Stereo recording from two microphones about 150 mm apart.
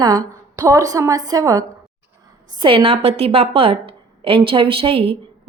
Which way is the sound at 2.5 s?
35° right (ahead or behind).